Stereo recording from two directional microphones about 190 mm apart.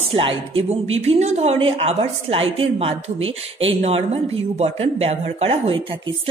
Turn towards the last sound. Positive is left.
turn(degrees=-30)  # may be behind; listen again after turning